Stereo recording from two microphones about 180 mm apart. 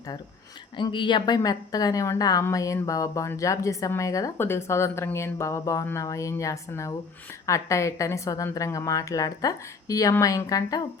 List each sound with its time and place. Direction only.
0.8 s a woman's voice: 25° left (ahead or behind)